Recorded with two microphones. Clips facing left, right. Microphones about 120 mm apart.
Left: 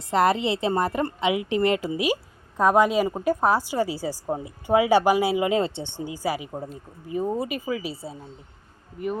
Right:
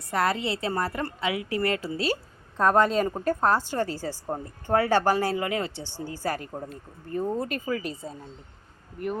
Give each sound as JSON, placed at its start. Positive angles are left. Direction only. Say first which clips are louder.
{"t": 0.1, "sound": "a woman's voice", "louder": "left 5 dB", "side_deg": 20}
{"t": 5.5, "sound": "speech", "louder": "left 6 dB", "side_deg": 25}